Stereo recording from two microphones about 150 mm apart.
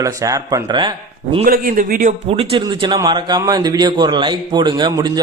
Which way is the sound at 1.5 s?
70° right (ahead or behind).